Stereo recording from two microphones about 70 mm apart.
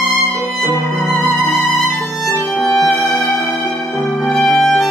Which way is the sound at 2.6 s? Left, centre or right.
Centre.